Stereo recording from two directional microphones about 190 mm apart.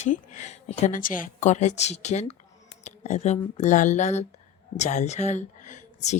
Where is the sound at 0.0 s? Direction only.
40° left (ahead or behind).